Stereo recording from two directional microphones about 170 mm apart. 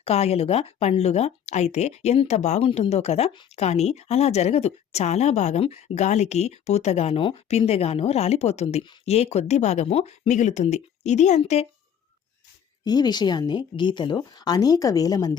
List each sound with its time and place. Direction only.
0.0 s speech: 35° left (ahead or behind)
12.8 s speech: 25° left (ahead or behind)